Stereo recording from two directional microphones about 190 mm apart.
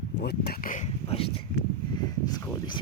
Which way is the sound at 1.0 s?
30° left (ahead or behind).